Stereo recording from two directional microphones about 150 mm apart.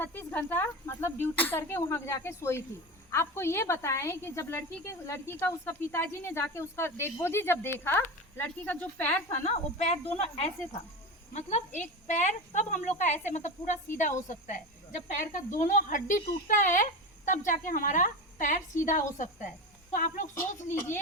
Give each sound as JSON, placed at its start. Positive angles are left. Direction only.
{"t": 0.0, "sound": "a woman's voice", "side_deg": 15}
{"t": 9.4, "sound": "speech", "side_deg": 50}
{"t": 15.1, "sound": "speech", "side_deg": 60}
{"t": 20.7, "sound": "a woman's voice", "side_deg": 15}